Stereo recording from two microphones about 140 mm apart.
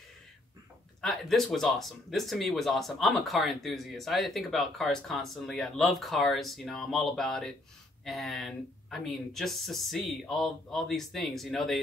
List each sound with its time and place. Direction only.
1.0 s speech: centre (ahead or behind)